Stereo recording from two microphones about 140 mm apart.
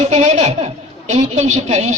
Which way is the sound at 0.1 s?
55° right (ahead or behind).